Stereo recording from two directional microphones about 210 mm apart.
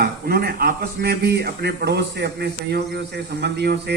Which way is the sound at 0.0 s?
45° right (ahead or behind).